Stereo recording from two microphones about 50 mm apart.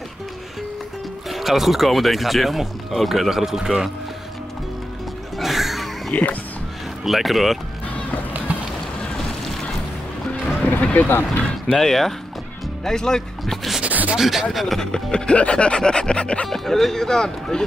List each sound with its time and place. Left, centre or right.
1.3 s speech: centre
5.4 s a sound: centre
7.1 s speech: centre
10.8 s music: left
11.1 s speech: left
11.6 s speech: centre
13.8 s a sound: right
14.1 s speech: centre
14.9 s music: centre
16.4 s speech: centre